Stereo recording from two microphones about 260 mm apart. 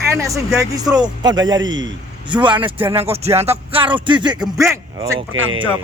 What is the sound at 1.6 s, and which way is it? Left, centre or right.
Speech, right.